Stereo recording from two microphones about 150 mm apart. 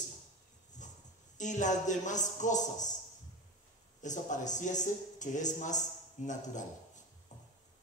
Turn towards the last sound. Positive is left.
turn(degrees=55)  # may be behind; listen again after turning